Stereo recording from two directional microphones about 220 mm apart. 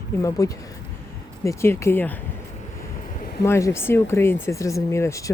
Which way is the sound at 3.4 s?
15° left (ahead or behind).